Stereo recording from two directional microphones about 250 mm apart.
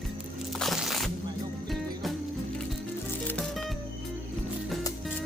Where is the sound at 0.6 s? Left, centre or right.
Centre.